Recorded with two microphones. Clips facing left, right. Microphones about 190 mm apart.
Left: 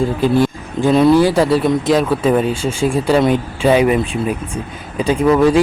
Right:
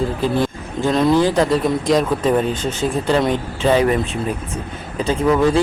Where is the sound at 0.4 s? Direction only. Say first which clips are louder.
Left 4 dB; 10° left (ahead or behind).